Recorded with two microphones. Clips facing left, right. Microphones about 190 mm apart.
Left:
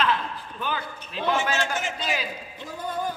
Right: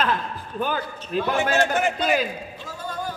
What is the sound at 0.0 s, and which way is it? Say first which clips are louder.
A man's voice: right 1 dB; 45° right (ahead or behind).